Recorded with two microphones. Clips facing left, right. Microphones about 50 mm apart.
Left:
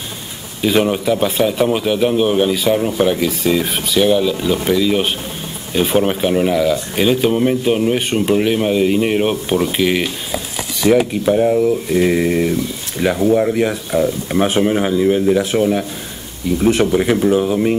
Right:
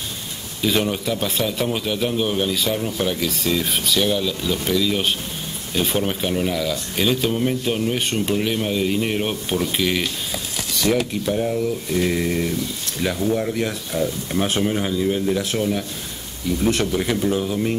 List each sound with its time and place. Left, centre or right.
0.6 s speech: centre